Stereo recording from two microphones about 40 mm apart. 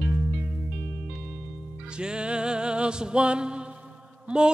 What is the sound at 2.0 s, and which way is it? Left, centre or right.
Music, right.